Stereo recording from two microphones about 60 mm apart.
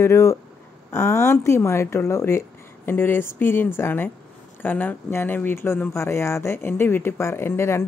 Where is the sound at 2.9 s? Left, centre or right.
Left.